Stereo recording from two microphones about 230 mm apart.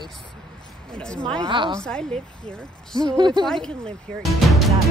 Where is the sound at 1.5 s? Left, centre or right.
Right.